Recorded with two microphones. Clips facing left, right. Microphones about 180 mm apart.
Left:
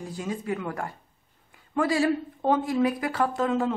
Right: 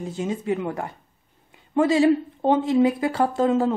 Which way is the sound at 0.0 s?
25° right (ahead or behind).